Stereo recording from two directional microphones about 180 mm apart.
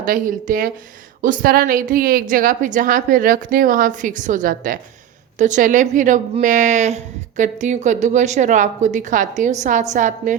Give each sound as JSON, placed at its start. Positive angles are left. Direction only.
{"t": 0.1, "sound": "a woman's voice", "side_deg": -50}